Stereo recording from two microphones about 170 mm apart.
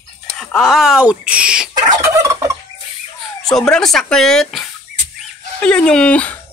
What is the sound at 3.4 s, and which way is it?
Speech, 5° left (ahead or behind).